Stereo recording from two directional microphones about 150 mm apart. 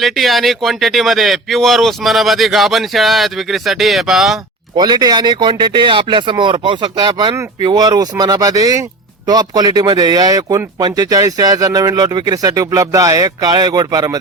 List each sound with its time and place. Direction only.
0.0 s speech: centre (ahead or behind)
4.8 s a man's voice: 25° right (ahead or behind)